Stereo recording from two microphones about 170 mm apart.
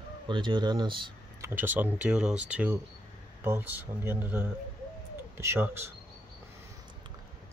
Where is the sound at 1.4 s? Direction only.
10° right (ahead or behind).